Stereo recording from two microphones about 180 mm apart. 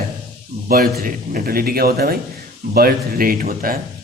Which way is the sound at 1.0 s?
55° right (ahead or behind).